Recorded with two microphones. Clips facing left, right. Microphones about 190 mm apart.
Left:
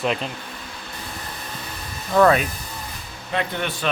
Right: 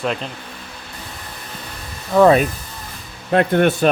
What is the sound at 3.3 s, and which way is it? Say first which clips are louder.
Speech: right 11 dB; 50° right (ahead or behind).